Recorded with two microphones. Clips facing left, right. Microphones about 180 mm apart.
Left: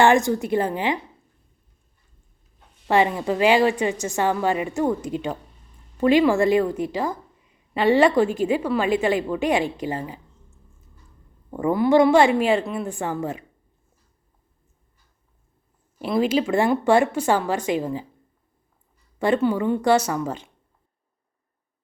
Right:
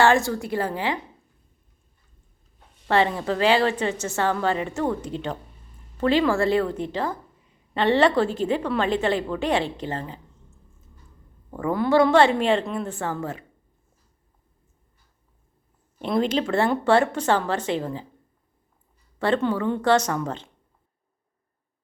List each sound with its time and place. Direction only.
0.0 s a woman's voice: 15° left (ahead or behind)
2.8 s a woman's voice: 15° left (ahead or behind)
11.5 s a woman's voice: 15° left (ahead or behind)
16.0 s a woman's voice: 5° left (ahead or behind)
19.2 s a woman's voice: 10° left (ahead or behind)